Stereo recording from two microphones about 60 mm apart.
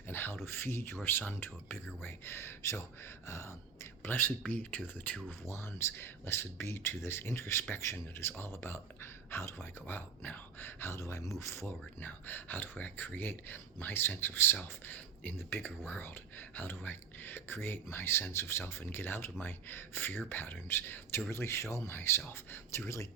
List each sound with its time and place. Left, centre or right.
0.1 s a sound: left
0.4 s speech: left
4.0 s speech: left
5.5 s speech: left
11.9 s speech: left